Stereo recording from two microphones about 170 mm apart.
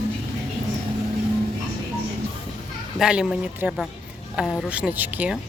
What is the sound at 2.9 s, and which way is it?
Speech, 5° right (ahead or behind).